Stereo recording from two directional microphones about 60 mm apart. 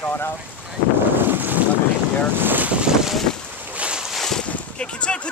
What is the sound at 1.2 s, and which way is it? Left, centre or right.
Boat, right.